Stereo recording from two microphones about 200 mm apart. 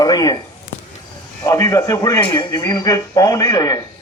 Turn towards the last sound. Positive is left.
turn(degrees=20)  # may be behind; listen again after turning